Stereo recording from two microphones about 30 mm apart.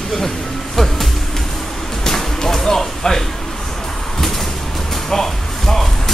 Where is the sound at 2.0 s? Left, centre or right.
Centre.